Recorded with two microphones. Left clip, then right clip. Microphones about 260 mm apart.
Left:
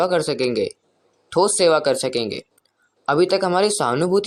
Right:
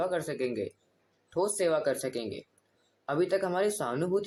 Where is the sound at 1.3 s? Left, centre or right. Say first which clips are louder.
Left 12 dB; left.